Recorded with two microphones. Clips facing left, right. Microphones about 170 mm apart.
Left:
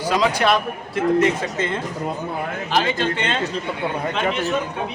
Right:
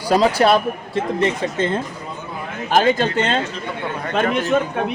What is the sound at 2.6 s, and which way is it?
Speech, 45° right (ahead or behind).